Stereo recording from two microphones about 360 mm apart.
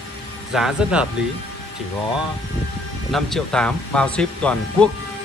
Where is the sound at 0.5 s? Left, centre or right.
Centre.